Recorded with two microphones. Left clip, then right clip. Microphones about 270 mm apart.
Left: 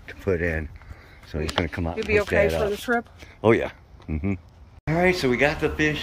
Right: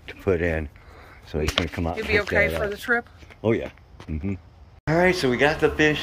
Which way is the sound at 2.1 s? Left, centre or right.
Left.